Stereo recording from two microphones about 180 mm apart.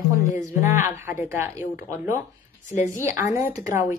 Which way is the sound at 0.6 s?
15° right (ahead or behind).